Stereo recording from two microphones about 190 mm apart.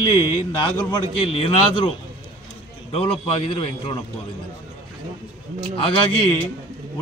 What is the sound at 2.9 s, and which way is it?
A man's voice, 30° left (ahead or behind).